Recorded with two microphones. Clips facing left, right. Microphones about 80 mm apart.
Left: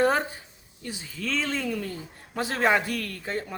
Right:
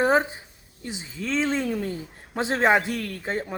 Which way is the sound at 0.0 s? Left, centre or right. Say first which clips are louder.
Right 2 dB; centre.